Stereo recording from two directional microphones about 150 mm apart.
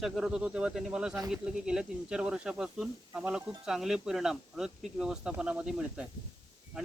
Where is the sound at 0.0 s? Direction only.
5° right (ahead or behind).